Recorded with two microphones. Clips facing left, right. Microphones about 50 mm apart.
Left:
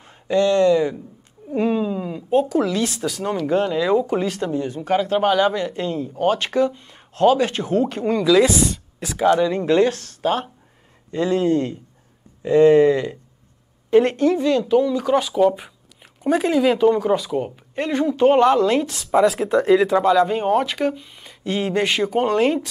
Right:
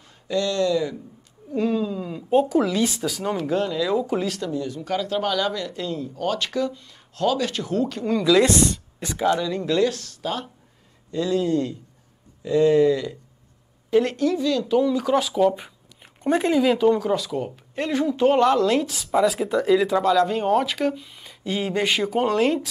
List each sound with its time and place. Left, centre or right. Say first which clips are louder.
0.0 s speech: left 6 dB; left
2.2 s speech: even; centre
3.4 s speech: left 5 dB; left
4.4 s speech: left 4 dB; left
8.3 s speech: left 2 dB; centre
9.3 s speech: left 7 dB; left
14.8 s speech: left 2 dB; centre